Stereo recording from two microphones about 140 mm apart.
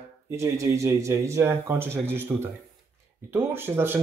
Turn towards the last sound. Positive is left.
turn(degrees=-15)  # may be behind; listen again after turning